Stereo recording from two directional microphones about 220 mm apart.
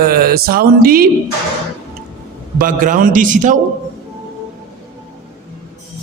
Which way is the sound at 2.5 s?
40° right (ahead or behind).